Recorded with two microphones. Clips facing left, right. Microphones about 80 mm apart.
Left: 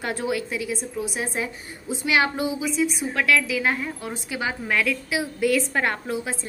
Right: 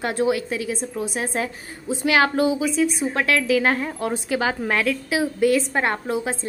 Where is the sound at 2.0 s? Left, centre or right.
Right.